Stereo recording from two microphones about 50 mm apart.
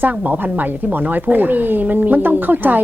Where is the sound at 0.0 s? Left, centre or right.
Right.